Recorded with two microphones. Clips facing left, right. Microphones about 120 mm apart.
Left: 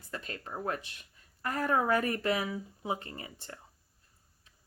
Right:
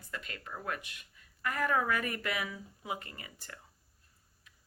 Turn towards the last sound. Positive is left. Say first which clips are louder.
# left 5 dB
turn(degrees=30)  # may be behind; listen again after turning